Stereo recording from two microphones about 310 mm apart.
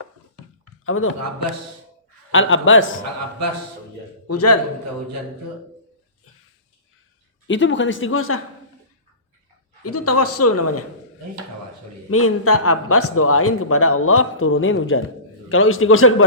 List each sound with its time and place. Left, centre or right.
0.9 s a man's voice: left
2.3 s speech: left
4.3 s a man's voice: left
7.4 s speech: left
9.8 s a man's voice: left
12.1 s a man's voice: left